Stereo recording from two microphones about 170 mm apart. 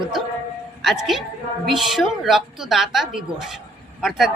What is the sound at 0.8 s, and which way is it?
A woman's voice, centre (ahead or behind).